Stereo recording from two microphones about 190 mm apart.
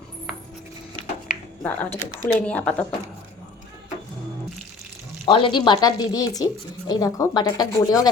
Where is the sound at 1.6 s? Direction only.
10° left (ahead or behind).